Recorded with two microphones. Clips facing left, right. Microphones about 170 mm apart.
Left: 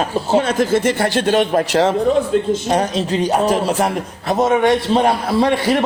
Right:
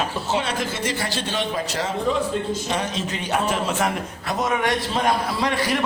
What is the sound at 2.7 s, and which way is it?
A man's voice, 40° left (ahead or behind).